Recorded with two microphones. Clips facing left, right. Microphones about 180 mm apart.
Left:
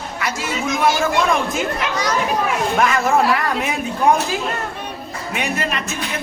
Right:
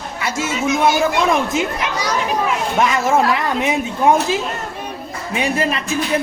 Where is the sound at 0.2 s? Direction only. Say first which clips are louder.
Right 3 dB; 25° right (ahead or behind).